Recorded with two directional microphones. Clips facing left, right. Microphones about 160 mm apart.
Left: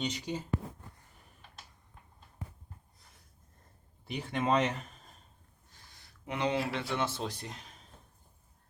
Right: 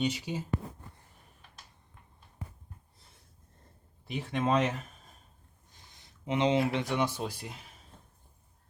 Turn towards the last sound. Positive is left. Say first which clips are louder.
# right 1 dB
turn(degrees=-5)  # may be behind; listen again after turning